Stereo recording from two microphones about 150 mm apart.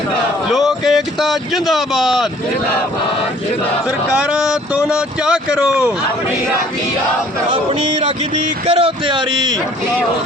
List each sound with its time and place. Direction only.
0.5 s speech: centre (ahead or behind)
4.9 s speech: 5° right (ahead or behind)
8.6 s a man's voice: 40° right (ahead or behind)